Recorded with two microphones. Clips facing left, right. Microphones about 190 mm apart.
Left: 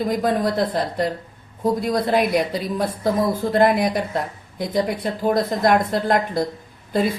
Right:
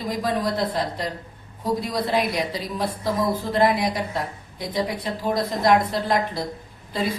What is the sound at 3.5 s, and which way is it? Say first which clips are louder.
A woman's voice: left 4 dB; 55° left (ahead or behind).